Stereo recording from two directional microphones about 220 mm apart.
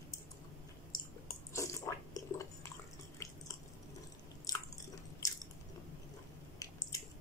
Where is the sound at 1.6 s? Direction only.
15° left (ahead or behind).